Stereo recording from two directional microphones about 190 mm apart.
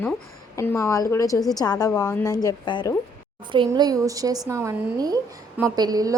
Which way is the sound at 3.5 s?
25° right (ahead or behind).